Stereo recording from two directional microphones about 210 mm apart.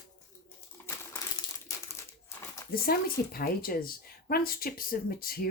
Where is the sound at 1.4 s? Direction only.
15° left (ahead or behind).